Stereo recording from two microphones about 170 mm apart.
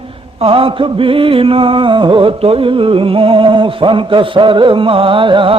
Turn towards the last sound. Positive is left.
turn(degrees=-30)  # may be behind; listen again after turning